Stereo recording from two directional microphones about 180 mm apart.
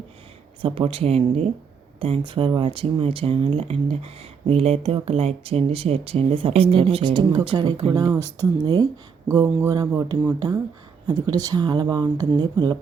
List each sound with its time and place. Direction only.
0.6 s speech: 30° right (ahead or behind)